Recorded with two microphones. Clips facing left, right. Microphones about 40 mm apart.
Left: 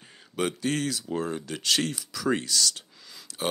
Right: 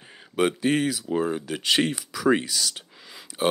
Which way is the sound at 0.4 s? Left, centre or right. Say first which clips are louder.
Right 5 dB; centre.